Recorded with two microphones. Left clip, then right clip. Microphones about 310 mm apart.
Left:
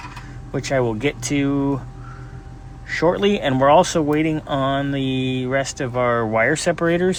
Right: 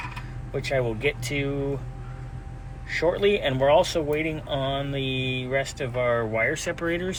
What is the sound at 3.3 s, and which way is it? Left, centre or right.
Speech, left.